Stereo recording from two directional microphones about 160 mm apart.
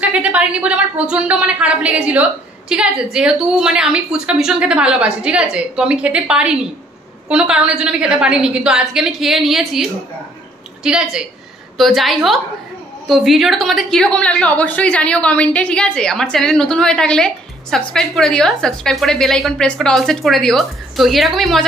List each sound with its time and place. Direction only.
0.0 s a woman's voice: 5° right (ahead or behind)